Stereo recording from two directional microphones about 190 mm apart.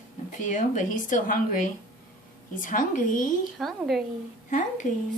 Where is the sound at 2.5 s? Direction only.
45° left (ahead or behind).